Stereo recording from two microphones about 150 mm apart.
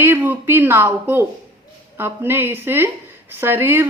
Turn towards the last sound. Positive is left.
turn(degrees=-15)  # may be behind; listen again after turning